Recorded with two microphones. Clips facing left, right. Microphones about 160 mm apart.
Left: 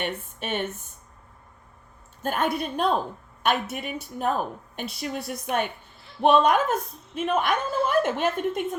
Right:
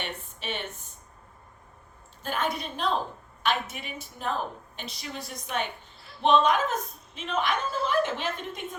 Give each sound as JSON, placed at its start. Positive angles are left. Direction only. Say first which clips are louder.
{"t": 0.0, "sound": "speech", "louder": "left 6 dB", "side_deg": 50}
{"t": 2.2, "sound": "a woman's voice", "louder": "left 5 dB", "side_deg": 50}